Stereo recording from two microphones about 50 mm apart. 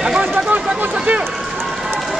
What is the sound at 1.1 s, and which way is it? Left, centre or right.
Speech, right.